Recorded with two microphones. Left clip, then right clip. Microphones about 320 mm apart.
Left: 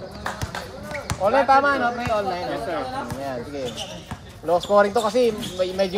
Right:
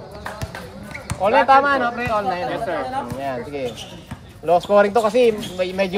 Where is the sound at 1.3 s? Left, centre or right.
Right.